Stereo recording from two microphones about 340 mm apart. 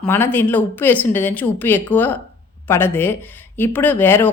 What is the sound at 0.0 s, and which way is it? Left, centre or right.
A woman's voice, centre.